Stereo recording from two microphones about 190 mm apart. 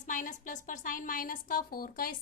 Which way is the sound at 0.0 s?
40° left (ahead or behind).